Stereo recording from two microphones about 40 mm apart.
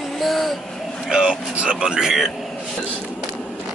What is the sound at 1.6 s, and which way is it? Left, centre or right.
Speech, centre.